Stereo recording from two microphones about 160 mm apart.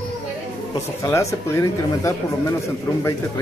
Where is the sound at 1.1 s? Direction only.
20° left (ahead or behind).